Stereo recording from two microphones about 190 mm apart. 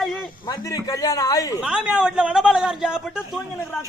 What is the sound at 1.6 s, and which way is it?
A man's voice, 5° right (ahead or behind).